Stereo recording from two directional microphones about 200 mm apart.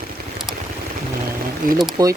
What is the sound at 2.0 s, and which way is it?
Speech, 20° right (ahead or behind).